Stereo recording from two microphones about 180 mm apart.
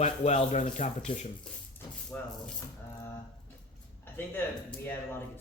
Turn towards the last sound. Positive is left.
turn(degrees=10)  # may be behind; listen again after turning